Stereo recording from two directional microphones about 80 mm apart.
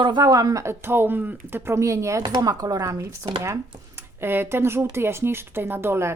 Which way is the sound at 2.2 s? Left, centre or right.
Right.